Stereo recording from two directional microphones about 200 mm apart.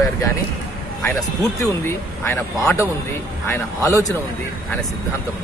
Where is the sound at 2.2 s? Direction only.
10° left (ahead or behind).